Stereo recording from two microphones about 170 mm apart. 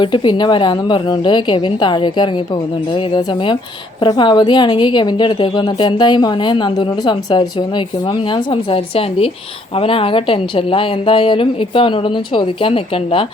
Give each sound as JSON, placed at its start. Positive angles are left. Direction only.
{"t": 0.0, "sound": "a woman's voice", "side_deg": 30}